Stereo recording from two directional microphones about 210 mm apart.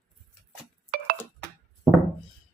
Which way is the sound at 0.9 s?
45° right (ahead or behind).